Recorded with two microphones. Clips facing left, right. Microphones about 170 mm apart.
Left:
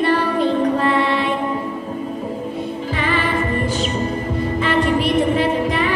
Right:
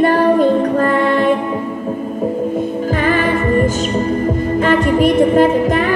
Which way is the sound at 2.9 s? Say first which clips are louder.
Right 5 dB; 45° right (ahead or behind).